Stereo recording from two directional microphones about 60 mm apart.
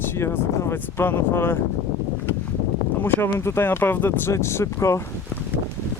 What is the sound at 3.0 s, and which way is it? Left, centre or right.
Speech, left.